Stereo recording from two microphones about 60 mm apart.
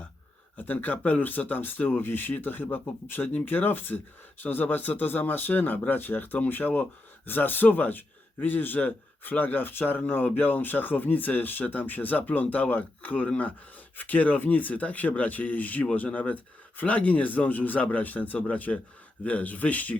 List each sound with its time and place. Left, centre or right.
0.5 s a man's voice: left